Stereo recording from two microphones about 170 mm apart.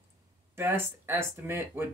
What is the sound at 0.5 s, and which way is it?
Speech, 15° right (ahead or behind).